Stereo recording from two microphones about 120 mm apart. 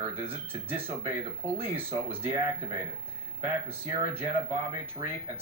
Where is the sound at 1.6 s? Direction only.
20° right (ahead or behind).